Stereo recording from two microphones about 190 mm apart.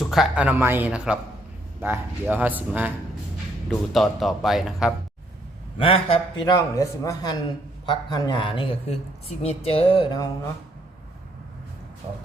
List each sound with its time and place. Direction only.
0.0 s a man's voice: centre (ahead or behind)
5.8 s a man's voice: 30° left (ahead or behind)